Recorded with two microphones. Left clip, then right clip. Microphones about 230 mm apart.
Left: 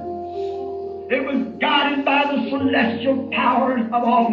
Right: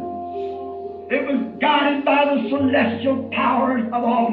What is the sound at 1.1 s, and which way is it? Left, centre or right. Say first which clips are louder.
Speech: even; left.